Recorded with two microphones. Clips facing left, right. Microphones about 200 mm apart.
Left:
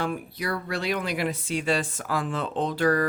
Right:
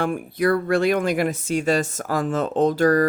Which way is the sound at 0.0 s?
50° right (ahead or behind).